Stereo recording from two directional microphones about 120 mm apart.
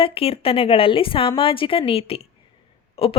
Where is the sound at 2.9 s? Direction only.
50° left (ahead or behind).